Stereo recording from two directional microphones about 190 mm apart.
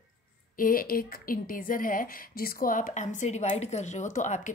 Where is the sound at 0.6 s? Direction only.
50° left (ahead or behind).